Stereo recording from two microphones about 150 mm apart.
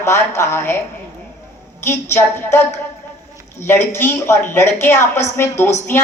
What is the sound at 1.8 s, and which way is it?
A woman's voice, 15° left (ahead or behind).